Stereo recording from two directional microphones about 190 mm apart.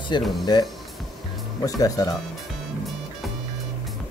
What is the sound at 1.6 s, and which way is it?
Speech, 20° left (ahead or behind).